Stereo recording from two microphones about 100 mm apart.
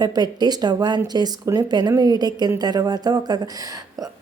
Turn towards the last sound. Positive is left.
turn(degrees=-40)  # may be behind; listen again after turning